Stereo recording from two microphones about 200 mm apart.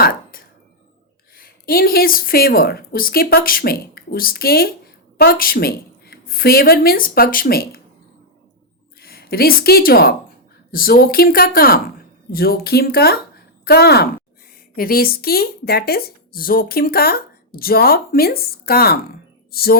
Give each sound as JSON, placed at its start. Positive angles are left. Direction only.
{"t": 0.0, "sound": "chopping", "side_deg": 45}
{"t": 1.4, "sound": "a woman's voice", "side_deg": 50}
{"t": 9.0, "sound": "a woman's voice", "side_deg": 50}